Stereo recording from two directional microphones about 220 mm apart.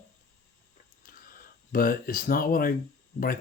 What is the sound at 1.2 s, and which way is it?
Speech, 40° left (ahead or behind).